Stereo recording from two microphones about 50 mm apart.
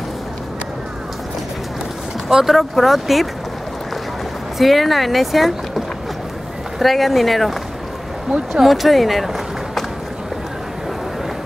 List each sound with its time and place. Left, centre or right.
2.2 s speech: centre
4.6 s speech: centre
8.3 s speech: centre
8.6 s speech: centre